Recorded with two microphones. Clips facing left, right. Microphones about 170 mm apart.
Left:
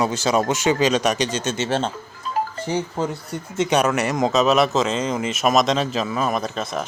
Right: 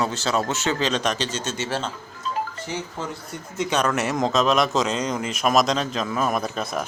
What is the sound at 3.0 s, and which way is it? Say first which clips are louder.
Speech: left 7 dB; 35° left (ahead or behind).